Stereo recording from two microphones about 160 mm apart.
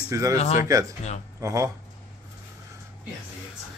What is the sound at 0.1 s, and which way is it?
Speech, 20° right (ahead or behind).